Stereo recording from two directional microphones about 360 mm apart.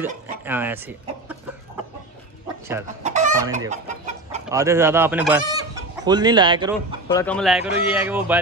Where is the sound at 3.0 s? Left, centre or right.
Centre.